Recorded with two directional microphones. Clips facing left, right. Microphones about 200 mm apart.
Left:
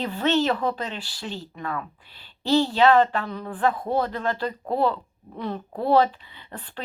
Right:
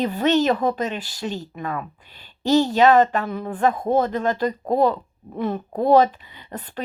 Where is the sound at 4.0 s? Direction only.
20° right (ahead or behind).